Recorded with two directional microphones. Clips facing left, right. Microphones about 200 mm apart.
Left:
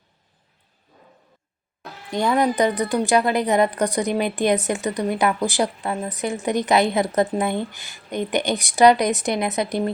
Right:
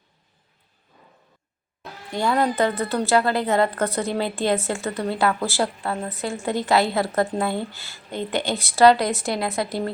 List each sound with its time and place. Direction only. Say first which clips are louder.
2.1 s a woman's voice: left 2 dB; 20° left (ahead or behind)